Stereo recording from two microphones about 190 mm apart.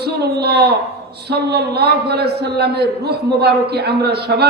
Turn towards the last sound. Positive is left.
turn(degrees=-60)  # may be behind; listen again after turning